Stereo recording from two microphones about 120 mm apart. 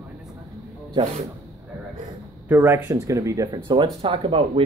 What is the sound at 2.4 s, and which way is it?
Speech, 15° right (ahead or behind).